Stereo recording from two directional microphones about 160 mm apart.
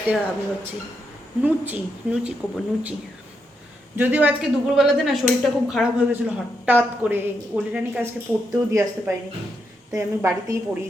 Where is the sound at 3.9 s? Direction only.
10° right (ahead or behind).